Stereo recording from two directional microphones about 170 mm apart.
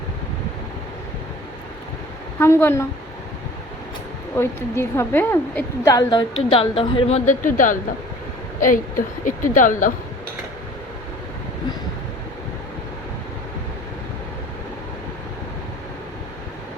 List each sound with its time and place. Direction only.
2.4 s a woman's voice: 15° left (ahead or behind)
4.4 s a woman's voice: 15° left (ahead or behind); by 7.2 s 35° left (ahead or behind)
7.3 s a woman's voice: 50° left (ahead or behind)